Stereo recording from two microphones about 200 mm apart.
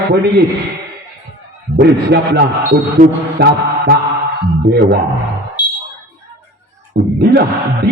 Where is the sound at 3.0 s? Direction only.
50° right (ahead or behind).